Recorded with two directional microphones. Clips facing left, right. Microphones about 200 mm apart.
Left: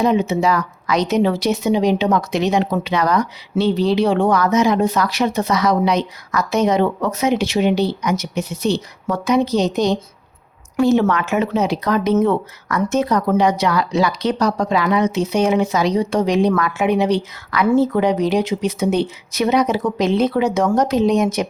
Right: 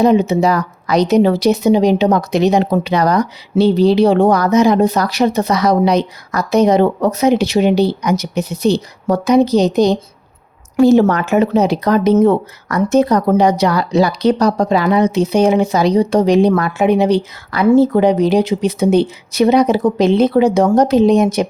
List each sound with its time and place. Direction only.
0.0 s speech: 40° right (ahead or behind)